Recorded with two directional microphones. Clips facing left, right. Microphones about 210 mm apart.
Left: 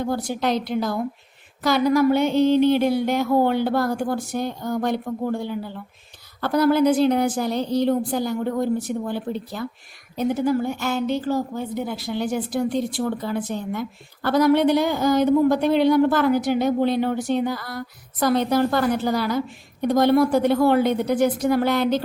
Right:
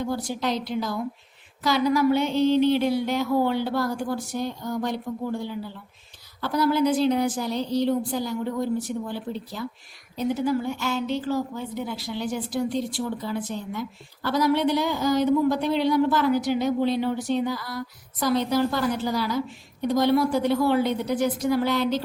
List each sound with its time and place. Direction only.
0.0 s a woman's voice: 55° left (ahead or behind)